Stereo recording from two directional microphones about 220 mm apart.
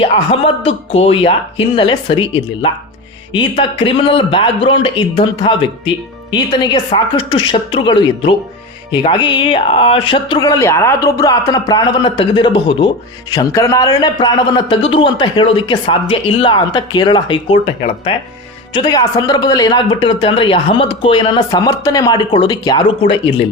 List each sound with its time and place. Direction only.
0.0 s a man's voice: 25° left (ahead or behind)
3.3 s a man's voice: 25° left (ahead or behind)